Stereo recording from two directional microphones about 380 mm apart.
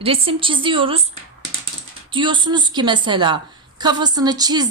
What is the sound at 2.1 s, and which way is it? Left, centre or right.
A woman's voice, centre.